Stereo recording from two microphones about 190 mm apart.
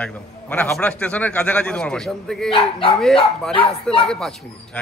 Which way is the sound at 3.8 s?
5° left (ahead or behind).